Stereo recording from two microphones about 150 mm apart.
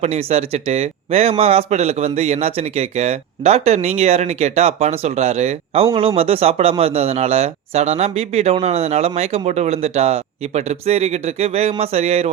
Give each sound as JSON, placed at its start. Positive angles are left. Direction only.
{"t": 0.0, "sound": "a man's voice", "side_deg": -45}